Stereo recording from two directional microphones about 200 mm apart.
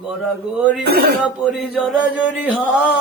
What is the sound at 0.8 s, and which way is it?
Speech, 50° right (ahead or behind).